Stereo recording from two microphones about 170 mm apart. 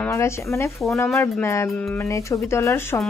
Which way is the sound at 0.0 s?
15° left (ahead or behind).